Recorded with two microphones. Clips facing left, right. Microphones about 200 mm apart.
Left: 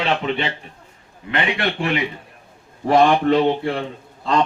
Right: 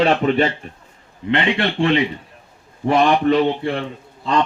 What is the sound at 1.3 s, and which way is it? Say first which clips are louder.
Speech: right 3 dB; 30° right (ahead or behind).